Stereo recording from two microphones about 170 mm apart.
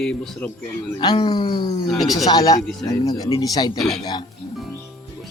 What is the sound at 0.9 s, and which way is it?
Speech, 25° left (ahead or behind).